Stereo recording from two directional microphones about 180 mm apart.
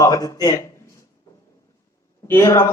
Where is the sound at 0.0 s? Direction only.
15° left (ahead or behind).